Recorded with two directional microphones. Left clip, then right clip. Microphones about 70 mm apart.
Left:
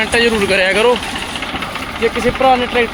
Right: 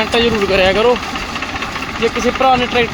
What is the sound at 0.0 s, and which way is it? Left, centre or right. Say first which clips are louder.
Speech: left 1 dB; centre.